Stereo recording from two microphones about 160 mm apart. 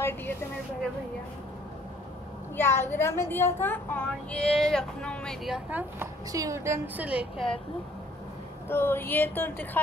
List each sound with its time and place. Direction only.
2.5 s a woman's voice: 15° left (ahead or behind); by 7.4 s 5° right (ahead or behind)
8.6 s a woman's voice: 15° left (ahead or behind)